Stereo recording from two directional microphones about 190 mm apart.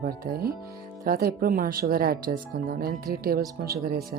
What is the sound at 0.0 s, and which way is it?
Speech, 50° right (ahead or behind).